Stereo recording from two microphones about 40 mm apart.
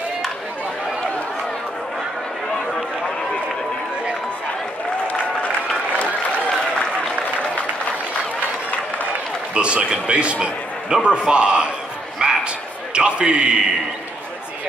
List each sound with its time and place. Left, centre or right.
9.5 s a man's voice: right
12.2 s a sound: right
12.9 s a man's voice: right